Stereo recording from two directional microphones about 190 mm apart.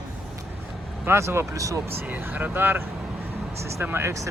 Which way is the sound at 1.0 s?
15° right (ahead or behind).